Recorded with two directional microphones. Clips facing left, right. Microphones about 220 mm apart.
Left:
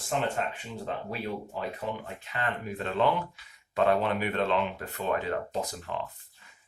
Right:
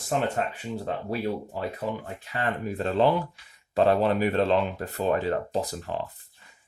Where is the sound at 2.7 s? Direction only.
35° right (ahead or behind).